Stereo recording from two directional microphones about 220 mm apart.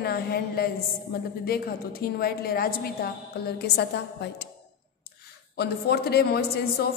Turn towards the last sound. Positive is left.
turn(degrees=45)  # may be behind; listen again after turning